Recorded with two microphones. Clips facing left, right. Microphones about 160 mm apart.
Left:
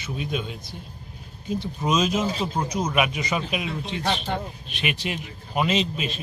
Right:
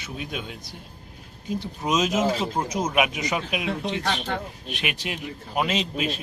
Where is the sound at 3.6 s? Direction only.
70° right (ahead or behind).